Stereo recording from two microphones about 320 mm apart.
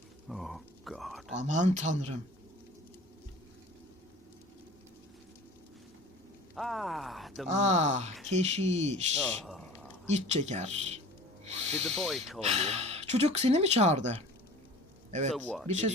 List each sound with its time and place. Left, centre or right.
0.3 s a sound: centre
1.4 s speech: right
6.6 s speech: centre
7.4 s speech: right
9.4 s a sound: centre
10.1 s speech: right
11.4 s snort: centre
11.9 s speech: centre
12.4 s speech: right
15.3 s speech: centre